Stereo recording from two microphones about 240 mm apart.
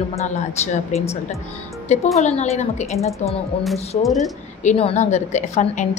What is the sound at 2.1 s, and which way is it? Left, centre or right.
Speech, left.